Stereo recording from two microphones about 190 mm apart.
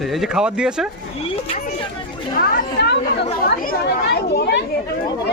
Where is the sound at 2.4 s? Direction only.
55° left (ahead or behind).